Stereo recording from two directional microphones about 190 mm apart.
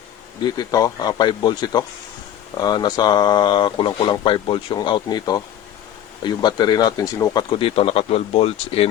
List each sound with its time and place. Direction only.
0.5 s speech: 20° left (ahead or behind)